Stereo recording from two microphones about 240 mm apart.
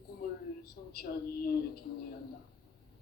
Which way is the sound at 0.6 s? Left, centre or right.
Left.